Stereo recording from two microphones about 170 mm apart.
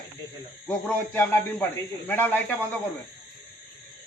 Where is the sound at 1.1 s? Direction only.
10° left (ahead or behind).